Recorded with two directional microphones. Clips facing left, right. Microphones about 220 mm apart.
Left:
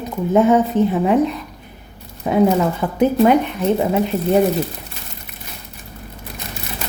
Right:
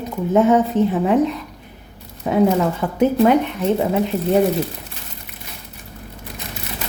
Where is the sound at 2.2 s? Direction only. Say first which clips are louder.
Left 1 dB; 10° left (ahead or behind).